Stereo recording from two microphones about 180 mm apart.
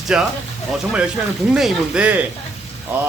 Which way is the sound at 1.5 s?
5° right (ahead or behind).